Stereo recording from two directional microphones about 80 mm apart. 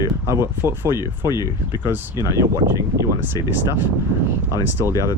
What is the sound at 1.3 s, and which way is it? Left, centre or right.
Speech, left.